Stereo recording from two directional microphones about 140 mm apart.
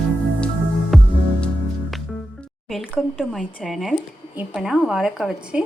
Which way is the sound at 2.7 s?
5° right (ahead or behind).